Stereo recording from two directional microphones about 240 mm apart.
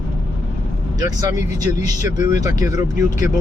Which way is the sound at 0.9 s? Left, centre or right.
Centre.